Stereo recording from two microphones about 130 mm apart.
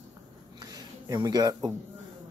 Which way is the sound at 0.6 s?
30° right (ahead or behind).